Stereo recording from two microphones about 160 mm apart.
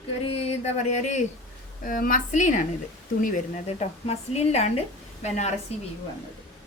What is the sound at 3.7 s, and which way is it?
A woman's voice, 40° left (ahead or behind).